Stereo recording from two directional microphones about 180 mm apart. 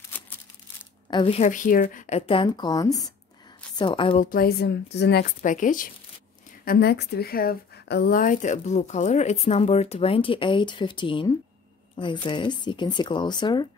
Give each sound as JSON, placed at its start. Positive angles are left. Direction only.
{"t": 1.1, "sound": "speech", "side_deg": 30}
{"t": 1.5, "sound": "speech", "side_deg": 50}
{"t": 4.1, "sound": "speech", "side_deg": 50}
{"t": 6.6, "sound": "speech", "side_deg": 60}